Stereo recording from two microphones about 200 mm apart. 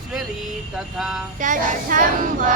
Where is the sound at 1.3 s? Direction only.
40° right (ahead or behind).